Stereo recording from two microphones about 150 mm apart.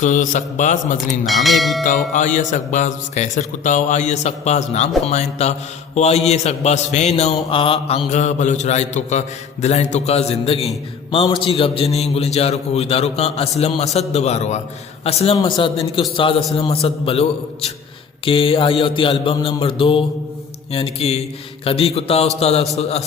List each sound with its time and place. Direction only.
0.0 s mantra: 55° left (ahead or behind)
1.3 s speech: centre (ahead or behind)
2.1 s a man's voice: 55° left (ahead or behind)
15.0 s mantra: 40° left (ahead or behind)
22.4 s a man's voice: 45° left (ahead or behind)